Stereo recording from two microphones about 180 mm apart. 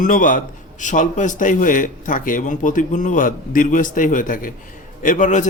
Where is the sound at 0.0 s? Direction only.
45° left (ahead or behind).